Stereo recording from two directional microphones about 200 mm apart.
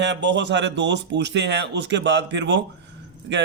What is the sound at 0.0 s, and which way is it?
A man's voice, 60° right (ahead or behind).